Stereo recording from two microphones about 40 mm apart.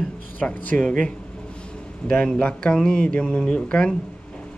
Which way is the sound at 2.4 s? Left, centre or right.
Left.